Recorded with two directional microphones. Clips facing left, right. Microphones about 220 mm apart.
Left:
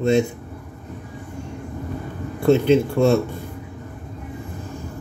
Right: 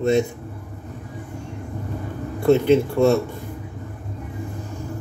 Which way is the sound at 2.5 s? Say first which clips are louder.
Even; 25° left (ahead or behind).